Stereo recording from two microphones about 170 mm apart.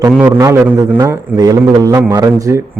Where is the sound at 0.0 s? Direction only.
15° right (ahead or behind).